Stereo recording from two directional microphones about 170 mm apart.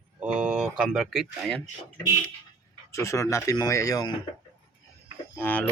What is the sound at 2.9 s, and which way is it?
Speech, 15° left (ahead or behind).